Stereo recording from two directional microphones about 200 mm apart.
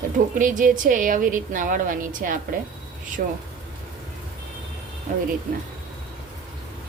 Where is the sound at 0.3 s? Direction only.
40° right (ahead or behind).